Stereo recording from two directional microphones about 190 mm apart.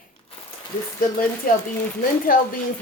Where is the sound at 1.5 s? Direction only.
50° left (ahead or behind).